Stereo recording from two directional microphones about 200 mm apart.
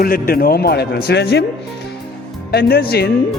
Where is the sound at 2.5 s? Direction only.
50° left (ahead or behind).